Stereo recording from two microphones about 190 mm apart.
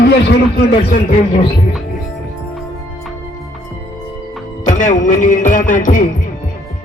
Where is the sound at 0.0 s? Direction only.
55° left (ahead or behind).